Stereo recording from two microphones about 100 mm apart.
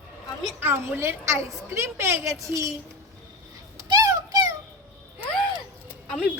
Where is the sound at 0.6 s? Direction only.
20° right (ahead or behind).